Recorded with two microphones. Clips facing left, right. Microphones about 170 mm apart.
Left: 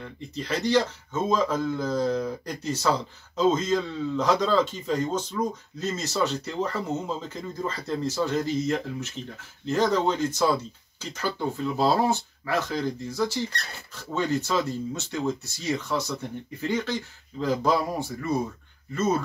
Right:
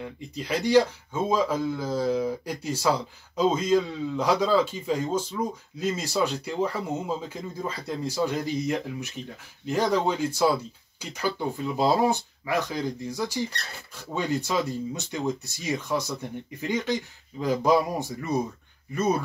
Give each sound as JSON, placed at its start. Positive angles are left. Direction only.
{"t": 0.0, "sound": "a man's voice", "side_deg": -10}